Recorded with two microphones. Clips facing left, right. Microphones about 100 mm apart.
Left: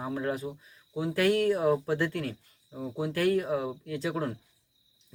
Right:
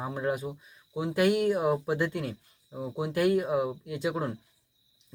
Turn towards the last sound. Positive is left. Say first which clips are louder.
# right 1 dB
turn(degrees=-10)  # may be behind; listen again after turning